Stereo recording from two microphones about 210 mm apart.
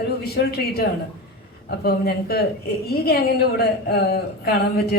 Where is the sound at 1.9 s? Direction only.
50° left (ahead or behind).